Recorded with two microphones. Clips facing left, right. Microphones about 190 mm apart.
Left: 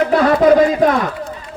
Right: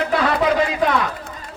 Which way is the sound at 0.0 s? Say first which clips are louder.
Left 7 dB; 45° left (ahead or behind).